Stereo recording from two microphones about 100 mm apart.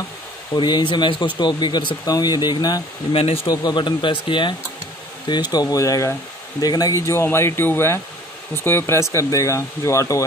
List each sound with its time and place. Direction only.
0.6 s speech: 50° left (ahead or behind)
3.1 s speech: 75° left (ahead or behind)
3.4 s speech: 45° left (ahead or behind)
5.3 s speech: 45° left (ahead or behind)